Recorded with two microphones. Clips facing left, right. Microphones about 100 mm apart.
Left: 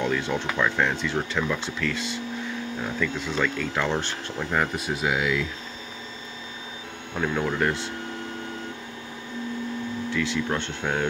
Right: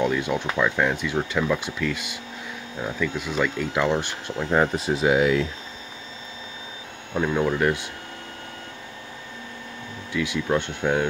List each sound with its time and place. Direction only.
0.0 s speech: 10° right (ahead or behind)
4.5 s speech: 30° right (ahead or behind)
7.2 s speech: 10° right (ahead or behind)
10.1 s speech: 10° right (ahead or behind)